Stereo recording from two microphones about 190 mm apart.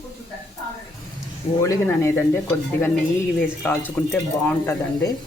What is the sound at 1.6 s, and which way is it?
Speech, 15° left (ahead or behind).